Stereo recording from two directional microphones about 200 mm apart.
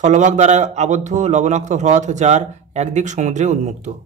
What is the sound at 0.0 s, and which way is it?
A man's voice, 35° right (ahead or behind).